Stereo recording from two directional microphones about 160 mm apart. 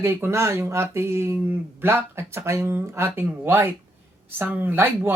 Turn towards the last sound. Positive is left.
turn(degrees=-10)  # may be behind; listen again after turning